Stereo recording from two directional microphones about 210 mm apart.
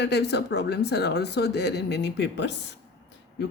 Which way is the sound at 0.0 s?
55° left (ahead or behind).